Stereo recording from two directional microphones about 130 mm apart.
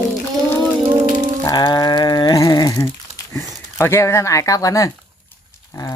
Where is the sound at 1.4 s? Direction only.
30° left (ahead or behind).